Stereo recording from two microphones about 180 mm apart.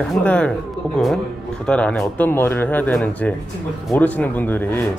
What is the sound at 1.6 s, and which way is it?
Speech, 5° left (ahead or behind).